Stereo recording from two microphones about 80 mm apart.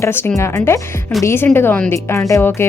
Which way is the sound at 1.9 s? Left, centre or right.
Left.